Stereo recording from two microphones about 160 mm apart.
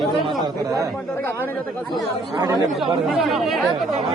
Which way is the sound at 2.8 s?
Centre (ahead or behind).